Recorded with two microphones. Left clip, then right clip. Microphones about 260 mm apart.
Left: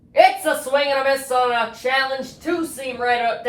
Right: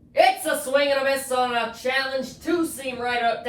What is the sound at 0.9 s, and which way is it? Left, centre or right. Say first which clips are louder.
Speech: left 3 dB; left.